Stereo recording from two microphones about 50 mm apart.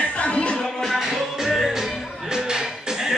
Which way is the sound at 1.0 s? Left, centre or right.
Centre.